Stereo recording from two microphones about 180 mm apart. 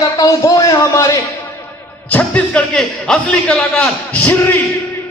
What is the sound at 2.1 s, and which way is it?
A man's voice, 5° left (ahead or behind).